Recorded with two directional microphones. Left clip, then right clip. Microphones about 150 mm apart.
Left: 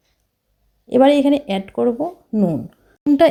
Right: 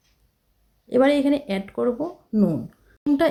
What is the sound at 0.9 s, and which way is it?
Speech, 20° left (ahead or behind).